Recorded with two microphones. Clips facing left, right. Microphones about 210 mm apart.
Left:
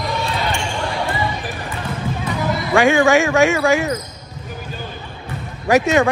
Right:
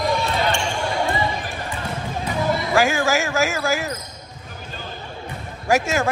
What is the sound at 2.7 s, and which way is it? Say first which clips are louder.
A man's voice: left 8 dB; centre (ahead or behind).